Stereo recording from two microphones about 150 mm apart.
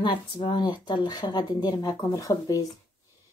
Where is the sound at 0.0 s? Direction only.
35° left (ahead or behind).